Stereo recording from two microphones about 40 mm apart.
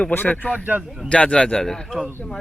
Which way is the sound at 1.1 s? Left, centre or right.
Left.